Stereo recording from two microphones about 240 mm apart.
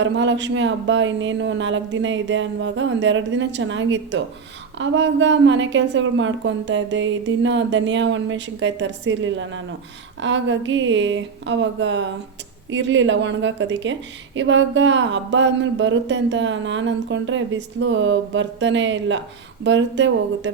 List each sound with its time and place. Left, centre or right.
0.0 s a woman's voice: right